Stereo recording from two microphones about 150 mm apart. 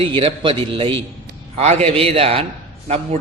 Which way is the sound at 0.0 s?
40° right (ahead or behind).